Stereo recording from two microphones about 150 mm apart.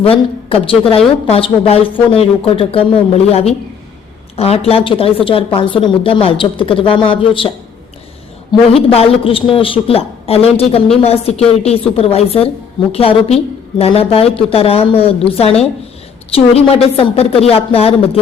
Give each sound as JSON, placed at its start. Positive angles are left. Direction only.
{"t": 0.0, "sound": "a woman's voice", "side_deg": 40}
{"t": 8.7, "sound": "a woman's voice", "side_deg": 40}